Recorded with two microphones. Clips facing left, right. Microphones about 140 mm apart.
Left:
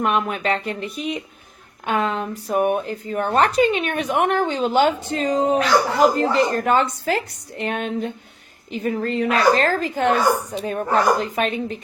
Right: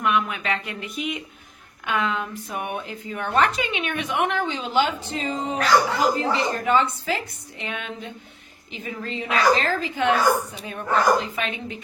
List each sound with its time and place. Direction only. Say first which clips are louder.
0.0 s a woman's voice: left 3 dB; 40° left (ahead or behind)